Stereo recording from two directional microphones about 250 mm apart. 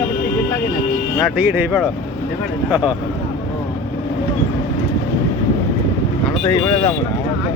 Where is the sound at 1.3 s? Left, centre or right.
Centre.